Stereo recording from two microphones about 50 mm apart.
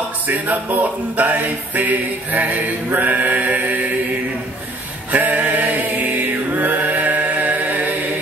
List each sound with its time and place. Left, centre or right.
0.3 s music: right
5.1 s mantra: right